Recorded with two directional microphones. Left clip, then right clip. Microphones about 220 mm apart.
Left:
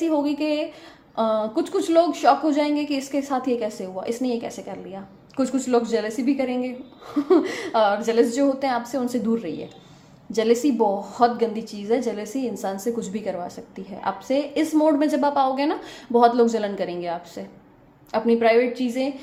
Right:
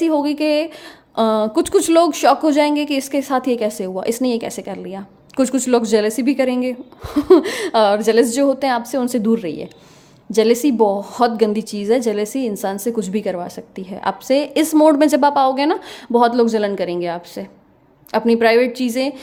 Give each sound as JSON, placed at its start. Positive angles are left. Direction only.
{"t": 0.0, "sound": "a woman's voice", "side_deg": -35}